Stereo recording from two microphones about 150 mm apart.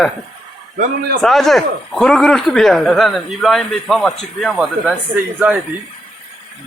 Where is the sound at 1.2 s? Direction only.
Centre (ahead or behind).